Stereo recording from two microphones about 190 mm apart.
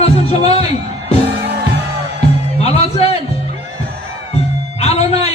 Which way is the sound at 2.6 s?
35° left (ahead or behind).